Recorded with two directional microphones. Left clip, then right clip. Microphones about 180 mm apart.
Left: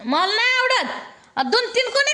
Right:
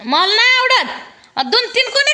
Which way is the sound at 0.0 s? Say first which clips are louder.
Right 6 dB; 30° right (ahead or behind).